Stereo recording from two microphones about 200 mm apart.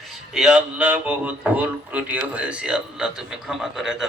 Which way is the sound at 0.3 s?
5° right (ahead or behind).